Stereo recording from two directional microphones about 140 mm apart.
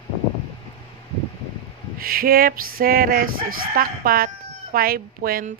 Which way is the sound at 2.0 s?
90° right.